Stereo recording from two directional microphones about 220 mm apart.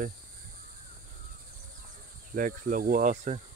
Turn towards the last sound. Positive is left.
turn(degrees=-35)  # may be behind; listen again after turning